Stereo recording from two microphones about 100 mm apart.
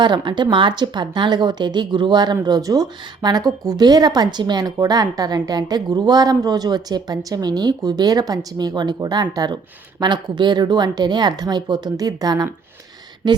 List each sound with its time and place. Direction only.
0.0 s a woman's voice: 50° right (ahead or behind)